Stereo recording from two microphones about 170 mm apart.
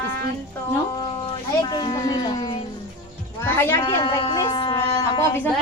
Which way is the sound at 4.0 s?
30° left (ahead or behind).